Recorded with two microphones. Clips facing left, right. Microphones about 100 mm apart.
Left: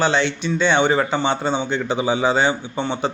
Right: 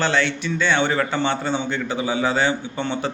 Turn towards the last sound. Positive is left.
turn(degrees=20)  # may be behind; listen again after turning